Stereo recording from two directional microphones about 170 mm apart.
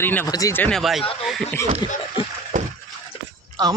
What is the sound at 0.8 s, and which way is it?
Speech, centre (ahead or behind).